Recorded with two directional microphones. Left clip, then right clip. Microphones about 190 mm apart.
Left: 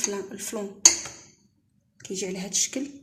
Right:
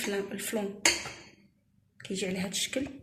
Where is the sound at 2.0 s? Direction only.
55° left (ahead or behind).